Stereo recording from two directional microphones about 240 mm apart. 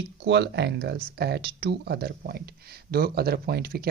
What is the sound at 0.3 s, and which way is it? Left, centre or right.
Speech, right.